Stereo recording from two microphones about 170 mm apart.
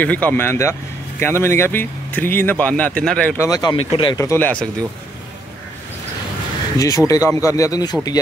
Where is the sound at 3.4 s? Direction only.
20° left (ahead or behind).